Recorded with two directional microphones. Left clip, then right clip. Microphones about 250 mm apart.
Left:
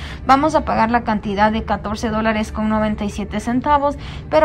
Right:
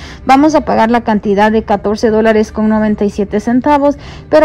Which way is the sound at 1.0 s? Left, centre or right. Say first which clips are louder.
Right 6 dB; centre.